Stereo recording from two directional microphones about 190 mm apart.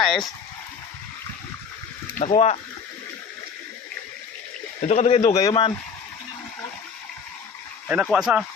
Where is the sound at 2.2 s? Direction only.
35° left (ahead or behind).